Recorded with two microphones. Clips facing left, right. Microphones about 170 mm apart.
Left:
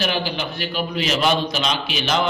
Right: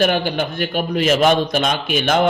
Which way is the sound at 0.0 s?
50° right (ahead or behind).